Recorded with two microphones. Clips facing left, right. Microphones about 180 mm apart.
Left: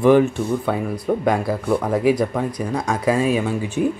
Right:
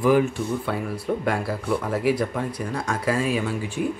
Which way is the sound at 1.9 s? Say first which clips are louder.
Left 5 dB; 20° left (ahead or behind).